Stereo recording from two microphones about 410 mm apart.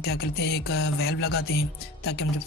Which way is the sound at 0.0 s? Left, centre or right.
Left.